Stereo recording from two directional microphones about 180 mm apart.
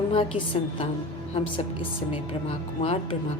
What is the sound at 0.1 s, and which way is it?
A woman's voice, 30° left (ahead or behind).